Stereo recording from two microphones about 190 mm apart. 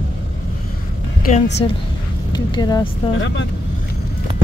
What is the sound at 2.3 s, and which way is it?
Speech, 20° left (ahead or behind).